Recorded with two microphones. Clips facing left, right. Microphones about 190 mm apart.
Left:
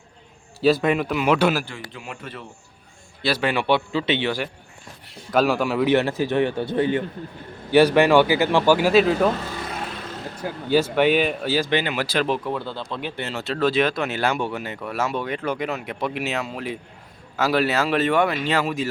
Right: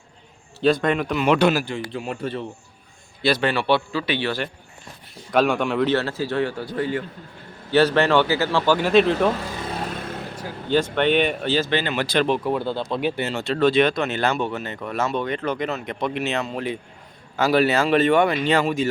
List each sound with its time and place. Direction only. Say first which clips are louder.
0.6 s speech: left 1 dB; 5° left (ahead or behind)
1.6 s a man's voice: right 8 dB; 25° right (ahead or behind)
3.2 s speech: right 1 dB; 10° left (ahead or behind)
5.3 s speech: even; centre (ahead or behind)
5.9 s a man's voice: left 3 dB; 15° left (ahead or behind)
10.7 s speech: left 1 dB; 5° left (ahead or behind)
12.5 s speech: right 5 dB; 15° right (ahead or behind)
13.2 s speech: right 1 dB; centre (ahead or behind)